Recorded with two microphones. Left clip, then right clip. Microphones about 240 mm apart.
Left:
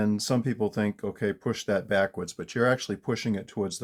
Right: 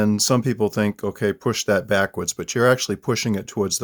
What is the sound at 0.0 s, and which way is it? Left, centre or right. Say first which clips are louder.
Speech: right 8 dB; right.